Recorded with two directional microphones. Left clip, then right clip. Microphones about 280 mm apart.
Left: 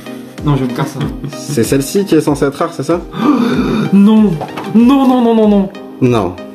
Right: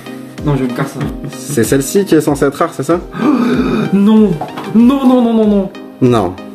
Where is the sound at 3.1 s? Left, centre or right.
Left.